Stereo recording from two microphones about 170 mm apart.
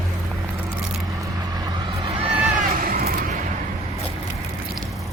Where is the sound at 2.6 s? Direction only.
55° right (ahead or behind).